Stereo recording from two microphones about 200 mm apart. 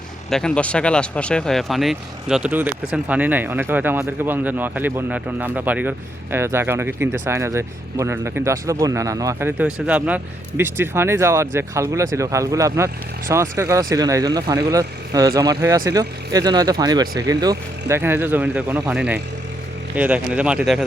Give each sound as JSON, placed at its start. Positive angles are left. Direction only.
{"t": 0.3, "sound": "speech", "side_deg": 5}